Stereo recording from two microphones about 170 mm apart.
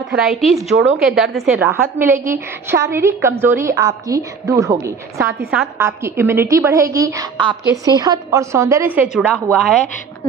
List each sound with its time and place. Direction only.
0.1 s a woman's voice: centre (ahead or behind)
1.6 s a woman's voice: 15° right (ahead or behind)
9.3 s a woman's voice: centre (ahead or behind)